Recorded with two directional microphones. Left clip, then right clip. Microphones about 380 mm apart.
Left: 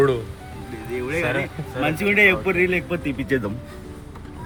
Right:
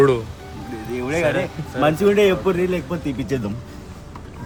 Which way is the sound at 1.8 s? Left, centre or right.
Centre.